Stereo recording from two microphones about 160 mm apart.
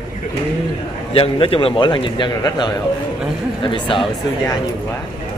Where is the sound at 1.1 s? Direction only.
35° left (ahead or behind).